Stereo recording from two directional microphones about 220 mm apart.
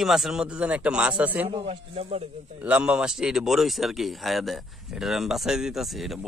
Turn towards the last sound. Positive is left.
turn(degrees=0)  # may be behind; listen again after turning